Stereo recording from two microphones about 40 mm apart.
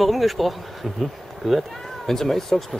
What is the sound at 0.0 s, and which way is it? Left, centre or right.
Speech, centre.